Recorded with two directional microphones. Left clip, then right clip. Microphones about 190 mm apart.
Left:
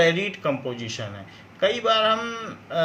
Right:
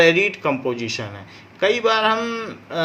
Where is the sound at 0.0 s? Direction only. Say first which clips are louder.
Right 5 dB; 40° right (ahead or behind).